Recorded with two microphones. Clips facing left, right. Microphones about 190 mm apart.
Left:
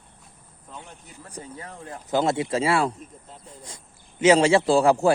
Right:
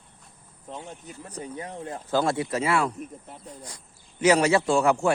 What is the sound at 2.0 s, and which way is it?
Speech, 20° left (ahead or behind).